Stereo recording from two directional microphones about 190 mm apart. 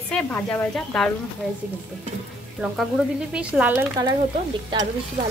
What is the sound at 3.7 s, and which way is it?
Speech, 15° right (ahead or behind).